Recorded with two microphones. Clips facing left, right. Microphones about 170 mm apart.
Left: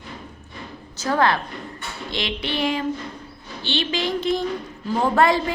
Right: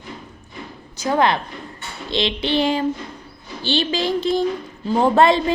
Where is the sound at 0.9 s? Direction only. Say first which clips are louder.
Right 2 dB; 15° right (ahead or behind).